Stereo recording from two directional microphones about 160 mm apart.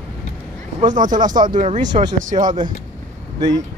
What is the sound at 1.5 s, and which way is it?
Speech, 50° right (ahead or behind).